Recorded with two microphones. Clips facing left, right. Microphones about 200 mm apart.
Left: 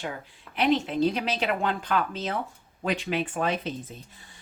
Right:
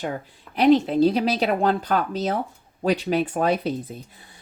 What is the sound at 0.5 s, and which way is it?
A woman's voice, 35° right (ahead or behind).